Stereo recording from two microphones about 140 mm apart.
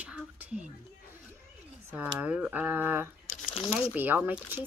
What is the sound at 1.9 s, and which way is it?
Speech, 10° right (ahead or behind).